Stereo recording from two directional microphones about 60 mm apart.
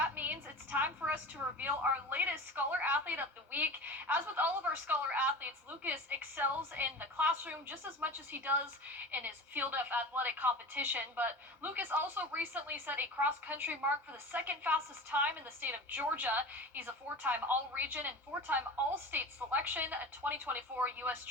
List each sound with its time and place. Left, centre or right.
0.0 s a woman's voice: right